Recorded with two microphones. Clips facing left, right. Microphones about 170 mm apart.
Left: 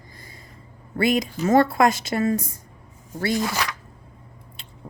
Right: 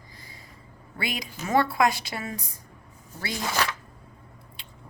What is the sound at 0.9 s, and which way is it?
Speech, 45° left (ahead or behind).